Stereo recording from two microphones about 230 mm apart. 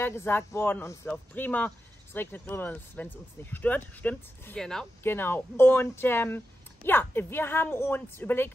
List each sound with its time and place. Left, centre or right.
0.0 s speech: centre